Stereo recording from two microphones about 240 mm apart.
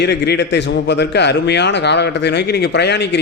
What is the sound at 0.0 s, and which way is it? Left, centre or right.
A man's voice, left.